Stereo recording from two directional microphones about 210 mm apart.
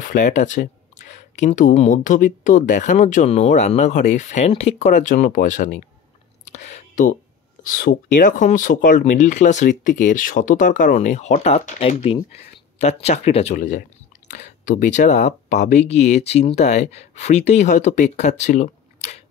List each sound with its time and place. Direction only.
0.0 s speech: 40° left (ahead or behind)
6.4 s whispering: 35° left (ahead or behind)
7.7 s speech: 40° left (ahead or behind)